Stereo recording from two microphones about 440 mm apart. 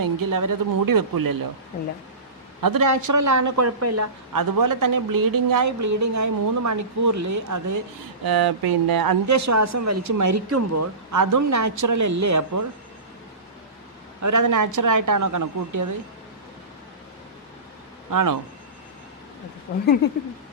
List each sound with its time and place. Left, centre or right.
0.0 s a woman's voice: right
2.6 s speech: right
8.2 s speech: right
14.2 s a woman's voice: right
18.1 s a woman's voice: right
19.7 s speech: left